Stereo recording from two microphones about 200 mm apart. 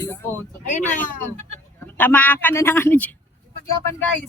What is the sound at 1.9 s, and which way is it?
Speech, 10° left (ahead or behind).